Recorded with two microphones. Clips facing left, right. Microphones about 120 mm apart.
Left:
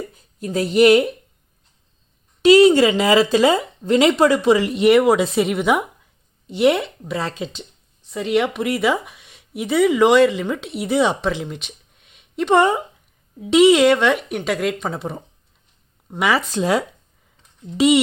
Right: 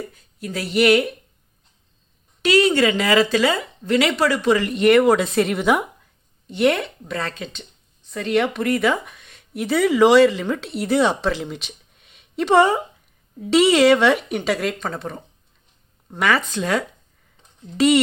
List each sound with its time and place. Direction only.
0.1 s speech: 25° left (ahead or behind)
2.4 s speech: 15° left (ahead or behind)
11.4 s a sound: centre (ahead or behind)
13.4 s speech: 10° left (ahead or behind)
13.9 s speech: 5° right (ahead or behind)
17.7 s speech: 20° left (ahead or behind)